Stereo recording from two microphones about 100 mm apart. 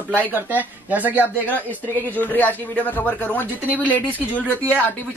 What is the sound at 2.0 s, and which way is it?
Speech, 15° left (ahead or behind).